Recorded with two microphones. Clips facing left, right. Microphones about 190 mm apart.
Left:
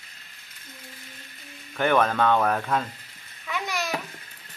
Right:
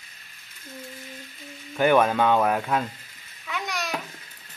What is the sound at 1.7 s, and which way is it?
Speech, 10° right (ahead or behind).